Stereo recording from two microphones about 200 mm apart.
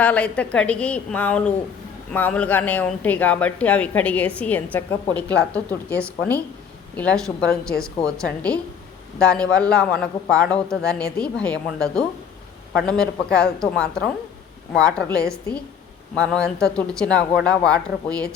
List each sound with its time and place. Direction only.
0.0 s speech: 5° left (ahead or behind)